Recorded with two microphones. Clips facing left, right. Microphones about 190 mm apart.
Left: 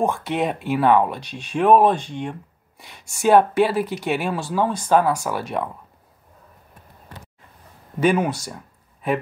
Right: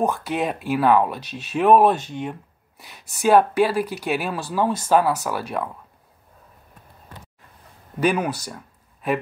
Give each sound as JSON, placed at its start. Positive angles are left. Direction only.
{"t": 0.0, "sound": "speech", "side_deg": 0}
{"t": 8.0, "sound": "speech", "side_deg": 0}